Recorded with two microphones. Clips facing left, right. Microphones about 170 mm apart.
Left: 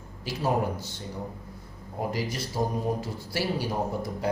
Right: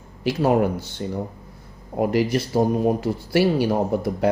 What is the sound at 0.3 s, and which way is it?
Speech, 65° right (ahead or behind).